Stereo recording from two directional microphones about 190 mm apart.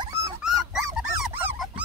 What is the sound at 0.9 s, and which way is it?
Dog, 5° right (ahead or behind).